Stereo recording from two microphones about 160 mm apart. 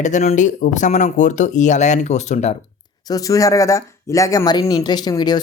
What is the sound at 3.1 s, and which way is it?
Speech, 20° left (ahead or behind).